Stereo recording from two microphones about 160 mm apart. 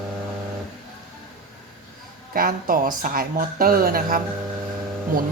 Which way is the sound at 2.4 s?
65° right (ahead or behind).